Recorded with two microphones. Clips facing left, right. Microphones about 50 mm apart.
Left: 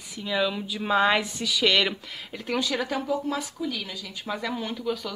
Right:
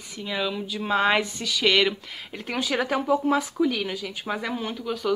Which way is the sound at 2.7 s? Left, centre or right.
Right.